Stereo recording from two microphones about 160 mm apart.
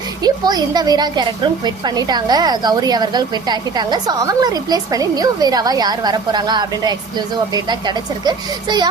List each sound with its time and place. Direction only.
0.2 s a woman's voice: 25° right (ahead or behind)